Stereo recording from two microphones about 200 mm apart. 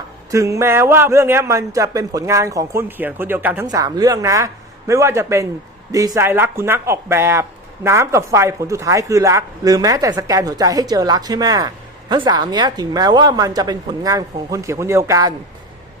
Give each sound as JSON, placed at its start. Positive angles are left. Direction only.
{"t": 0.3, "sound": "speech", "side_deg": -15}